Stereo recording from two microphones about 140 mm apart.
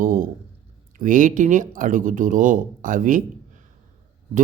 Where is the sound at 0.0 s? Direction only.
75° right (ahead or behind).